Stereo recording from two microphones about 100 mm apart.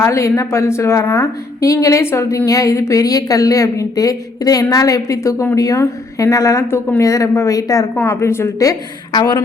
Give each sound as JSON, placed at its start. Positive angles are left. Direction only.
{"t": 0.0, "sound": "a woman's voice", "side_deg": 30}
{"t": 7.9, "sound": "a woman's voice", "side_deg": 20}